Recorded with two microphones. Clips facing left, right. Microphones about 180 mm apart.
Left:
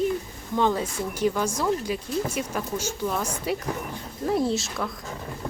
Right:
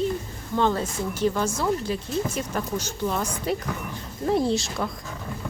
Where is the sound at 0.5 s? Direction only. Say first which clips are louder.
Even; 10° left (ahead or behind).